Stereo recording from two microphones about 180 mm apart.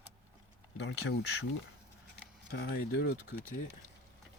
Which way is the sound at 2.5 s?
60° left (ahead or behind).